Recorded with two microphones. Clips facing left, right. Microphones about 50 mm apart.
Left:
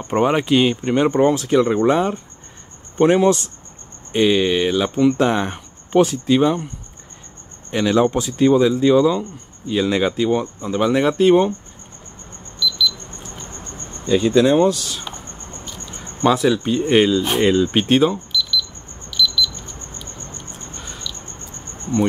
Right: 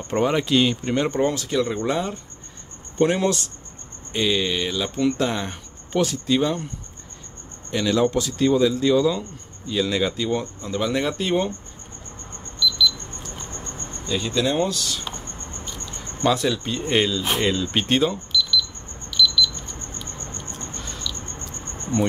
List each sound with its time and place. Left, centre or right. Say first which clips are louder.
0.0 s speech: left 4 dB; centre
7.7 s speech: left 4 dB; left
12.5 s alarm clock: left 1 dB; centre
14.0 s speech: left 9 dB; centre
17.2 s speech: left 5 dB; centre
17.5 s speech: left 8 dB; centre
18.3 s a sound: even; centre
20.8 s cricket: left 1 dB; centre